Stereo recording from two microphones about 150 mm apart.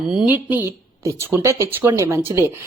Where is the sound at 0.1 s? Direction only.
10° right (ahead or behind).